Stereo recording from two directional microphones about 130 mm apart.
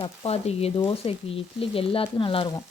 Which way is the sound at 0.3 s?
50° left (ahead or behind).